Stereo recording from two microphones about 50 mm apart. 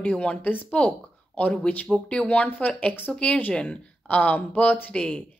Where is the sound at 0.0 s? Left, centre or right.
Left.